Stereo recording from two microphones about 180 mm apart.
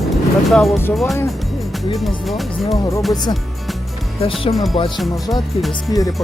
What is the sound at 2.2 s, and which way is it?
Speech, centre (ahead or behind).